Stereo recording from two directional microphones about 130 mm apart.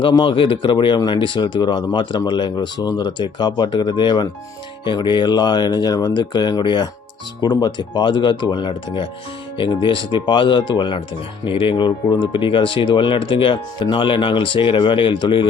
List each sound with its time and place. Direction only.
0.0 s speech: 40° left (ahead or behind)